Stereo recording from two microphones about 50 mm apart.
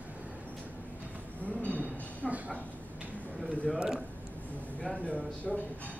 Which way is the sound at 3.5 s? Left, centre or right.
Left.